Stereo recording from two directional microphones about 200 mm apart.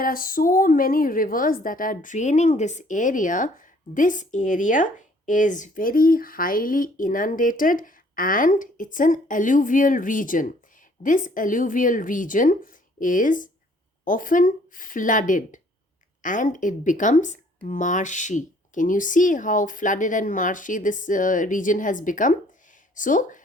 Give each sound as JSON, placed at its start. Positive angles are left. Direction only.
{"t": 0.0, "sound": "a woman's voice", "side_deg": 45}